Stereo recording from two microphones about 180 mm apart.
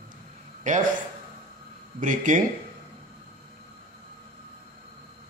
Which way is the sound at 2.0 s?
45° right (ahead or behind).